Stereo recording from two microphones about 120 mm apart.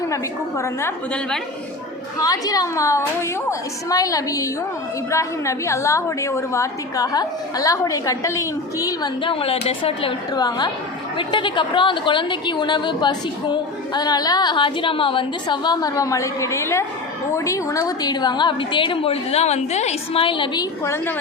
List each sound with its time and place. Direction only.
0.1 s a woman's voice: 25° left (ahead or behind)
2.1 s a woman's voice: 30° left (ahead or behind); by 10.2 s 50° left (ahead or behind)
10.3 s a woman's voice: 35° left (ahead or behind)
20.8 s a woman's voice: 20° left (ahead or behind)